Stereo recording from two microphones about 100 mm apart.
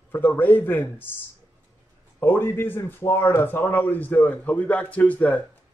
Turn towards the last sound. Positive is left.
turn(degrees=15)  # may be behind; listen again after turning